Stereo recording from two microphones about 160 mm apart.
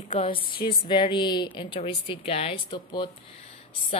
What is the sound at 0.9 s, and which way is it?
A woman's voice, 30° left (ahead or behind).